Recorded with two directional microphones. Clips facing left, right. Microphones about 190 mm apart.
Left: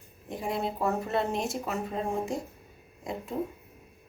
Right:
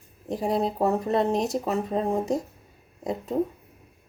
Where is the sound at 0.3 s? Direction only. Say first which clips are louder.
Right 6 dB; 40° right (ahead or behind).